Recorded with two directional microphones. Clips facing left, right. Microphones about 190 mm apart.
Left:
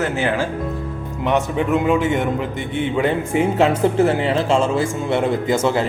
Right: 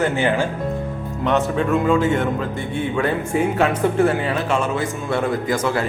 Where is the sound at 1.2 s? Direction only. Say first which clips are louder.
Even; 15° left (ahead or behind).